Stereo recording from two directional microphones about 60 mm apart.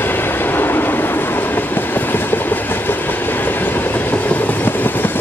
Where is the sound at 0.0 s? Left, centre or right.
Left.